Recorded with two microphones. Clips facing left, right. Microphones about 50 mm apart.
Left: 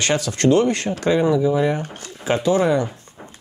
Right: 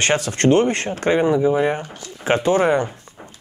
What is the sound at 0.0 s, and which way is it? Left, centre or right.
Speech, right.